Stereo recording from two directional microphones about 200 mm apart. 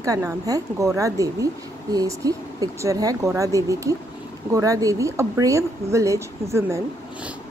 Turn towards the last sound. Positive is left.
turn(degrees=-15)  # may be behind; listen again after turning